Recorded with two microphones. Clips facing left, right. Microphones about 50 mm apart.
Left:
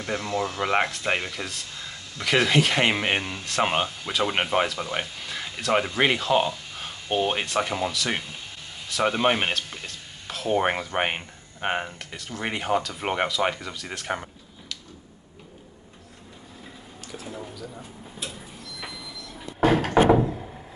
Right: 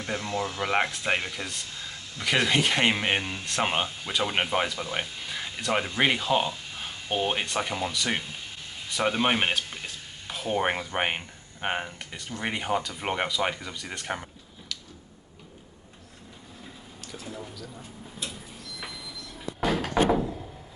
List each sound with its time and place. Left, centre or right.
0.0 s speech: centre
5.2 s speech: centre
13.8 s a sound: centre
17.1 s speech: centre
18.8 s train: centre
19.6 s a sound: left